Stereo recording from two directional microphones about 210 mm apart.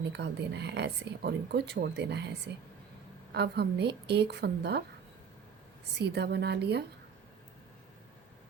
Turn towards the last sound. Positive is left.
turn(degrees=-50)  # may be behind; listen again after turning